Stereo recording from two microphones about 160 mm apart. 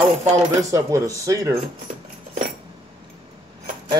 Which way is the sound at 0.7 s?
20° right (ahead or behind).